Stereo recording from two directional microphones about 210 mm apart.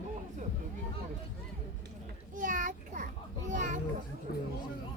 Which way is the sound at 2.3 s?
40° right (ahead or behind).